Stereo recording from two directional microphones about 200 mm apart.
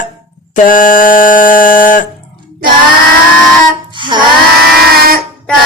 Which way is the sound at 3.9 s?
25° right (ahead or behind).